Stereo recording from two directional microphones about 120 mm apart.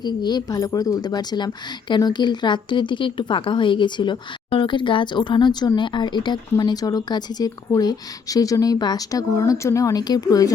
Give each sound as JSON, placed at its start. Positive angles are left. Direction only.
{"t": 0.0, "sound": "speech", "side_deg": 35}